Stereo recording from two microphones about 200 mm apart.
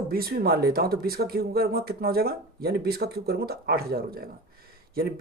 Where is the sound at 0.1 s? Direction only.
50° right (ahead or behind).